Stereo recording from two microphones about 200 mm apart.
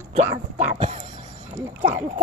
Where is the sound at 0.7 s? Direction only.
35° right (ahead or behind).